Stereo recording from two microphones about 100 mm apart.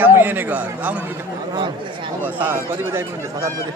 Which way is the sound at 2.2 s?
20° right (ahead or behind).